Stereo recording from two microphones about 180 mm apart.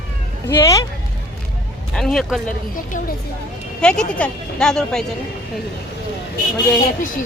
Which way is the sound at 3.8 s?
5° left (ahead or behind).